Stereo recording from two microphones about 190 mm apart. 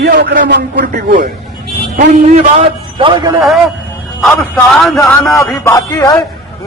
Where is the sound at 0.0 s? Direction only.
60° right (ahead or behind).